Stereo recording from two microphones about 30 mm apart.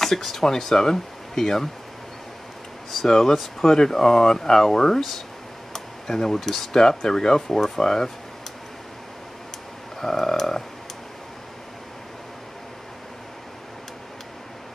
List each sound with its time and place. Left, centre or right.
0.0 s speech: centre
3.1 s speech: centre
6.8 s speech: left
9.9 s a sound: centre